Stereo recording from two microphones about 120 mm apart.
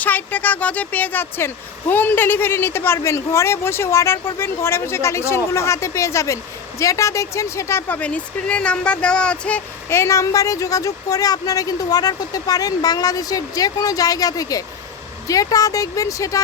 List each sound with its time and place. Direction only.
0.0 s speech: 15° left (ahead or behind)
9.9 s speech: 25° left (ahead or behind)